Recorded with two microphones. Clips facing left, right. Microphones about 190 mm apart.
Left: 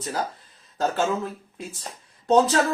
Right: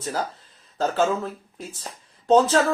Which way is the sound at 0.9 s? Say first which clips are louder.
Right 2 dB; 15° left (ahead or behind).